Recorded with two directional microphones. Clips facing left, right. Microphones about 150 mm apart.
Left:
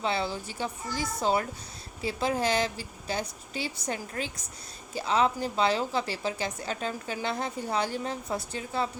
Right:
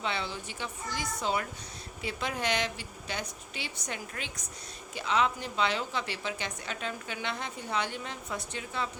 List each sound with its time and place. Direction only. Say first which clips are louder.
0.0 s a woman's voice: left 5 dB; 35° left (ahead or behind)